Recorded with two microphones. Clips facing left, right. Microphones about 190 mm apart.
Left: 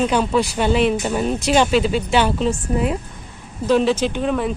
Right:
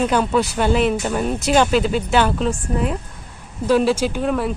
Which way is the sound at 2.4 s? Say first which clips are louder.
Left 1 dB; centre (ahead or behind).